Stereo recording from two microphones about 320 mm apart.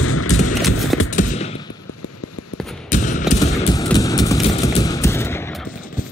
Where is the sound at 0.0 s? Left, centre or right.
Left.